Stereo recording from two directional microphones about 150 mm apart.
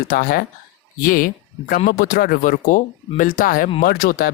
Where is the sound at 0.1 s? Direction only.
80° left.